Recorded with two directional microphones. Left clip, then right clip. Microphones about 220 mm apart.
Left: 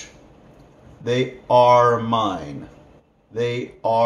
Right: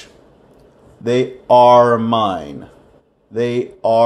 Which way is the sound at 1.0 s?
40° right (ahead or behind).